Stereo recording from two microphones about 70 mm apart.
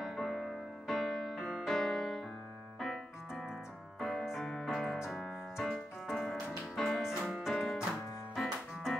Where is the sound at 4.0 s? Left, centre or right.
Centre.